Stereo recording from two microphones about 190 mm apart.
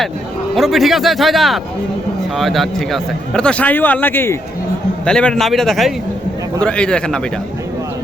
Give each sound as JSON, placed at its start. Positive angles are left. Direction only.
{"t": 0.5, "sound": "a man's voice", "side_deg": 0}